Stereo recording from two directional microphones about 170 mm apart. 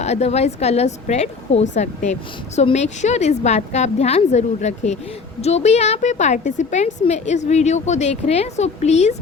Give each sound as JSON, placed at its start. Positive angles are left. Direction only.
{"t": 0.0, "sound": "a woman's voice", "side_deg": 40}